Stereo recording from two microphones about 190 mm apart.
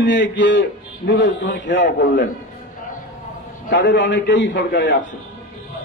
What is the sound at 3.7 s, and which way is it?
A man's voice, 70° left (ahead or behind).